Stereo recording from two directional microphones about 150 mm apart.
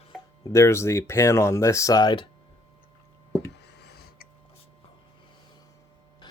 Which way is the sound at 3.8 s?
90° left.